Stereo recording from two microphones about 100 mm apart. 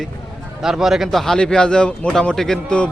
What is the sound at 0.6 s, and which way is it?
A man's voice, 5° right (ahead or behind).